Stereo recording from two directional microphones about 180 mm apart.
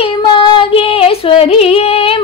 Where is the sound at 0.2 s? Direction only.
25° left (ahead or behind).